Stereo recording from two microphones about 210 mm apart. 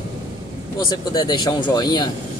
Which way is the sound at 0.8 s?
20° left (ahead or behind).